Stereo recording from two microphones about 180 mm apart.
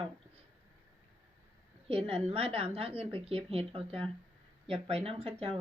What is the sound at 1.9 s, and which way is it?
Speech, 30° right (ahead or behind).